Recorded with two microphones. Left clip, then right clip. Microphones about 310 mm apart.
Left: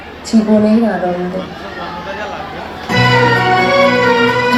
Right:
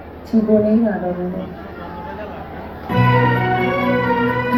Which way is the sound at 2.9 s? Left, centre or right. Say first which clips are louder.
Left 6 dB; left.